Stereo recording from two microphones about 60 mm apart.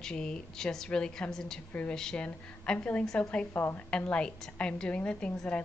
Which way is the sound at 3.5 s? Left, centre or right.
Left.